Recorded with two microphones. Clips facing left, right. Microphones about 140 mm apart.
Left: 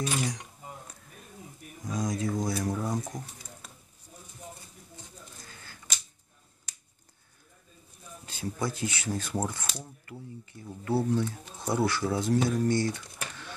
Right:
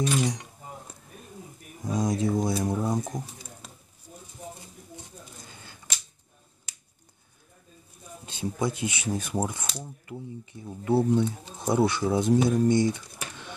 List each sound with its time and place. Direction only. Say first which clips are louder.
1.9 s pigeon: right 5 dB; 30° right (ahead or behind)
5.4 s a sound: right 2 dB; 20° right (ahead or behind)
8.3 s speech: right 4 dB; 20° right (ahead or behind)